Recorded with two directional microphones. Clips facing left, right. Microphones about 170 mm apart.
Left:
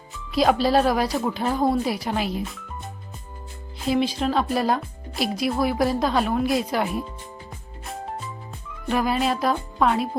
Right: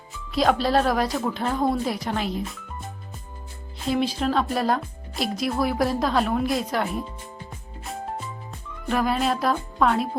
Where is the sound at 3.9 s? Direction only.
Centre (ahead or behind).